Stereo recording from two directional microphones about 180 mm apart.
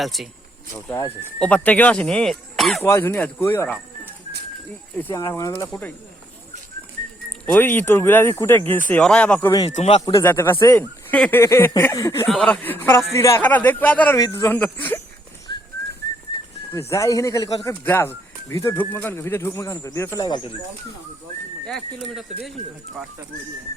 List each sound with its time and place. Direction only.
0.0 s speech: centre (ahead or behind)
0.9 s speech: 15° left (ahead or behind)
2.8 s speech: 15° left (ahead or behind)
4.9 s speech: 15° left (ahead or behind)
7.4 s speech: 10° left (ahead or behind)
9.6 s speech: 35° left (ahead or behind)
10.2 s speech: 15° left (ahead or behind)
15.5 s pigeon: 25° left (ahead or behind)
16.7 s speech: 15° left (ahead or behind)
21.7 s speech: centre (ahead or behind)